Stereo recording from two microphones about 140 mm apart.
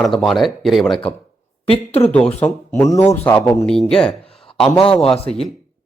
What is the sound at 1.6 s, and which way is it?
Speech, 45° left (ahead or behind).